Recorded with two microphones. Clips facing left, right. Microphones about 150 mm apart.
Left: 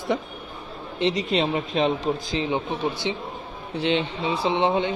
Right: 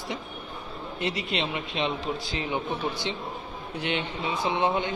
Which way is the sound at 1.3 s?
40° left (ahead or behind).